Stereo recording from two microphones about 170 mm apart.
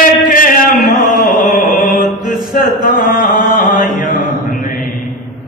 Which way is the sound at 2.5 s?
55° left (ahead or behind).